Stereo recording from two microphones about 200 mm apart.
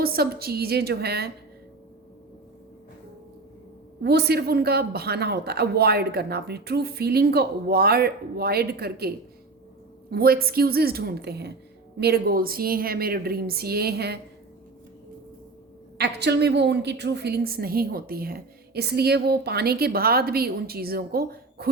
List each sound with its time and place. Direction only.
0.0 s a woman's voice: 50° right (ahead or behind)
4.0 s a woman's voice: 55° right (ahead or behind)
16.0 s a woman's voice: 55° right (ahead or behind)